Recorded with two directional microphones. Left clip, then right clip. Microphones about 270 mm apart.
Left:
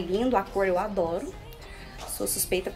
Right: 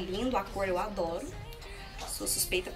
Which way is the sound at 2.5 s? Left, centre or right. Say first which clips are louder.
Left 4 dB; centre.